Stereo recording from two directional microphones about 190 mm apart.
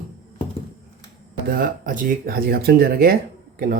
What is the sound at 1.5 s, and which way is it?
Speech, 45° right (ahead or behind).